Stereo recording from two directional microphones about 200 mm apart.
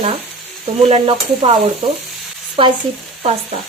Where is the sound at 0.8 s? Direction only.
30° right (ahead or behind).